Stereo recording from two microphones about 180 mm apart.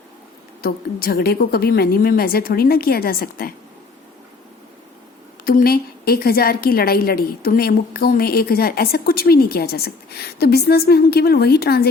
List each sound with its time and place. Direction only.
0.6 s a woman's voice: 55° left (ahead or behind)
5.5 s a woman's voice: 55° left (ahead or behind)